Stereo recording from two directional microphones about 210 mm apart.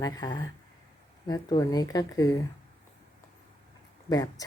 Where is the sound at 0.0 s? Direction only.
20° left (ahead or behind).